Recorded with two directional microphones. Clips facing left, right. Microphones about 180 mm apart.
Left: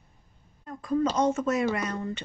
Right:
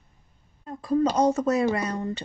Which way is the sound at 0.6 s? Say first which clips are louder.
Right 3 dB; 30° right (ahead or behind).